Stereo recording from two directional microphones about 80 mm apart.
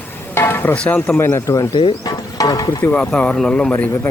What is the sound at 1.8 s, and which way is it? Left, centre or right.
Speech, left.